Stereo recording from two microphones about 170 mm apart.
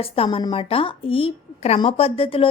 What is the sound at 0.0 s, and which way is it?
A woman's voice, 35° left (ahead or behind).